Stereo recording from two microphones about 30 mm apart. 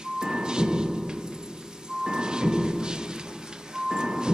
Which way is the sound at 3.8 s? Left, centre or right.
Centre.